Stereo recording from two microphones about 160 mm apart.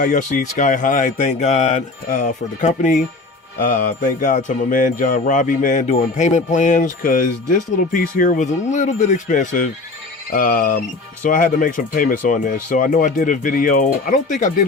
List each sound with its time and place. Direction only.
0.0 s speech: 55° left (ahead or behind)